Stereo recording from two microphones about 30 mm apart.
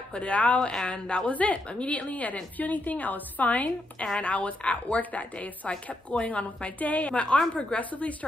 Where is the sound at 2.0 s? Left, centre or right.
Left.